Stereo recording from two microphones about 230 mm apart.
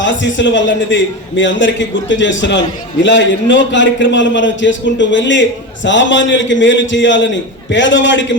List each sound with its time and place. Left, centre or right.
0.0 s a man's voice: left